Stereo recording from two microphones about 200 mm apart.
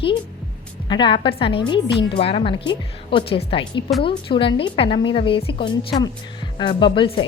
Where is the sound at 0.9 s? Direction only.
25° left (ahead or behind).